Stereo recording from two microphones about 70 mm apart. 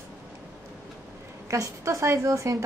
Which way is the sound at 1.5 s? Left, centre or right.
Right.